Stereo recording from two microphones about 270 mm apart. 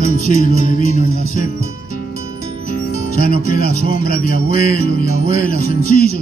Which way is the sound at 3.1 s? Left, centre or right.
Left.